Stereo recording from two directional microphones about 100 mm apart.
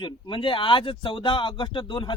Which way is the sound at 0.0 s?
55° left (ahead or behind).